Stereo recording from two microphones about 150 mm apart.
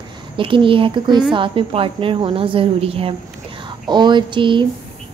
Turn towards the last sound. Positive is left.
turn(degrees=-35)  # may be behind; listen again after turning